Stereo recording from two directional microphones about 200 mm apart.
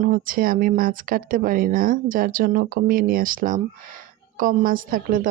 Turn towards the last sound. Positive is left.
turn(degrees=-45)  # may be behind; listen again after turning